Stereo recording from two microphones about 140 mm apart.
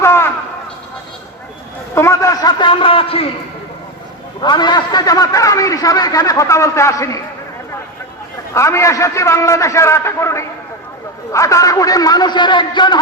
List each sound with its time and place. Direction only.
0.0 s a sound: 20° left (ahead or behind)
2.0 s a man's voice: 20° left (ahead or behind); by 3.2 s 40° left (ahead or behind)
4.4 s a man's voice: 30° left (ahead or behind)
8.5 s a man's voice: 20° left (ahead or behind)